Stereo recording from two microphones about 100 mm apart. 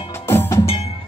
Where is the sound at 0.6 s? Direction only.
80° left.